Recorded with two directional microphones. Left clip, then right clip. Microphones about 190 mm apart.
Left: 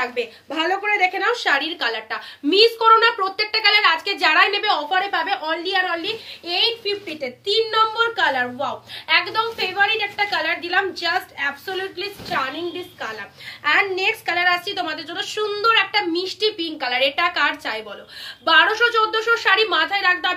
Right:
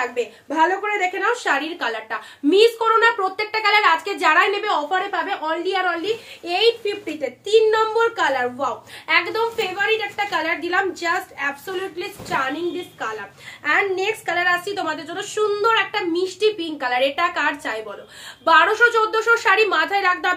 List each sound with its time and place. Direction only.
0.1 s a woman's voice: 20° right (ahead or behind); by 12.4 s 40° right (ahead or behind)
13.7 s a woman's voice: 20° right (ahead or behind); by 20.3 s 35° right (ahead or behind)